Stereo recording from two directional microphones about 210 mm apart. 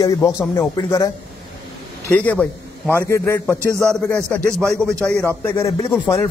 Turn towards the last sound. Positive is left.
turn(degrees=10)  # may be behind; listen again after turning